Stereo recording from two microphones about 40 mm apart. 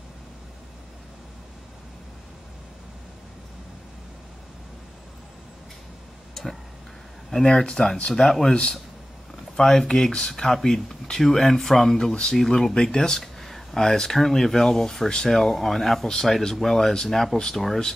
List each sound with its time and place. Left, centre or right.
7.4 s speech: centre
8.1 s speech: centre
9.6 s speech: centre
13.2 s speech: centre